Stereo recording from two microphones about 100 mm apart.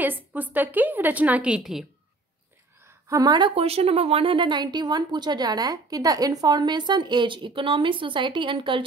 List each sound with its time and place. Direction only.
0.0 s a woman's voice: 15° right (ahead or behind)
3.1 s a woman's voice: 40° right (ahead or behind)
3.5 s a woman's voice: 80° right; by 8.8 s 55° right (ahead or behind)